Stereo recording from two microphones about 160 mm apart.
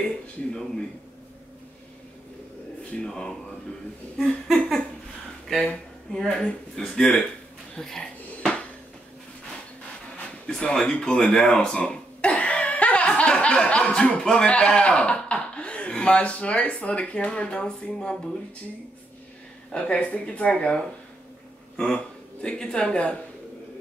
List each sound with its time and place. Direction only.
0.0 s speech: 5° left (ahead or behind)
3.0 s speech: 5° left (ahead or behind)
4.2 s a sound: centre (ahead or behind)
5.5 s speech: 5° left (ahead or behind)
7.7 s dishes: 5° left (ahead or behind)
10.1 s speech: 5° left (ahead or behind)
19.7 s speech: 5° left (ahead or behind)